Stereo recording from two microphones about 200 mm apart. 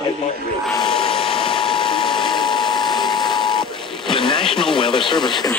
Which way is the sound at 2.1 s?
25° left (ahead or behind).